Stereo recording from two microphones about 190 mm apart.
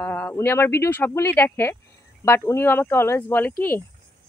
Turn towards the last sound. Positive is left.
turn(degrees=10)  # may be behind; listen again after turning